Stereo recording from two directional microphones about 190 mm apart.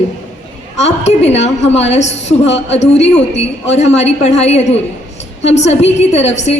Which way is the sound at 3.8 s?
35° left (ahead or behind).